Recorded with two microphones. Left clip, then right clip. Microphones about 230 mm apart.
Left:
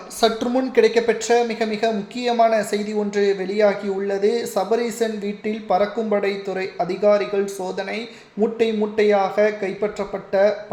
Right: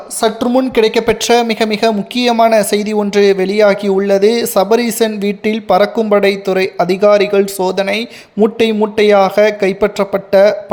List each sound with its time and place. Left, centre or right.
0.2 s a woman's voice: right